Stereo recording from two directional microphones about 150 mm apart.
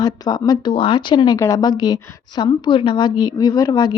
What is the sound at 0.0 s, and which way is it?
Speech, 25° left (ahead or behind).